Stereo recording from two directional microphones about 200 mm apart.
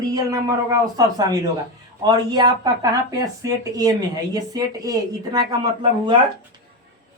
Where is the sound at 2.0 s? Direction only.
20° right (ahead or behind).